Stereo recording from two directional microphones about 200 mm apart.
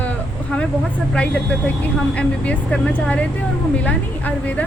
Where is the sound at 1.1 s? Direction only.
5° left (ahead or behind).